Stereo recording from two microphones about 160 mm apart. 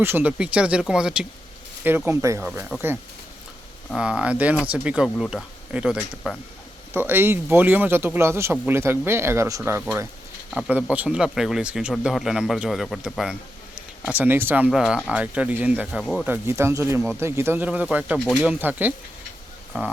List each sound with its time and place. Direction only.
0.0 s a man's voice: 10° right (ahead or behind)
3.9 s a man's voice: 5° right (ahead or behind)
5.0 s a man's voice: 5° left (ahead or behind)
14.2 s a man's voice: 15° right (ahead or behind)
16.2 s a man's voice: 15° right (ahead or behind)